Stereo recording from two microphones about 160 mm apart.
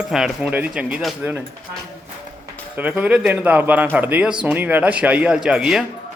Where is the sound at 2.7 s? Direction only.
10° right (ahead or behind).